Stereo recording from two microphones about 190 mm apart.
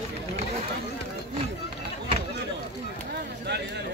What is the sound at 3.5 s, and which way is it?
Chatter, 65° right (ahead or behind).